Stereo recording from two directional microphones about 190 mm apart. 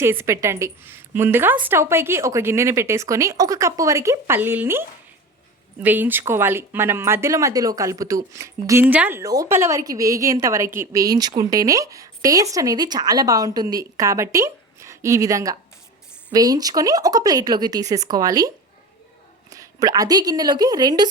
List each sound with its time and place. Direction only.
0.0 s speech: 10° right (ahead or behind)